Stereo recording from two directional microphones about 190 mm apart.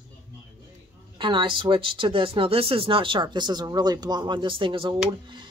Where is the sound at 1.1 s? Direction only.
25° right (ahead or behind).